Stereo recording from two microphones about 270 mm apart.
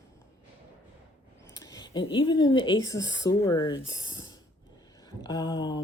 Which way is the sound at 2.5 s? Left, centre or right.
Centre.